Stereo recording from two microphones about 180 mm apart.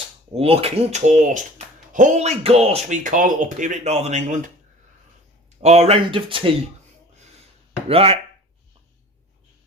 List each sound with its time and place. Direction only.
0.3 s speech: 35° right (ahead or behind)
5.5 s speech: 35° right (ahead or behind)
7.9 s speech: 30° right (ahead or behind)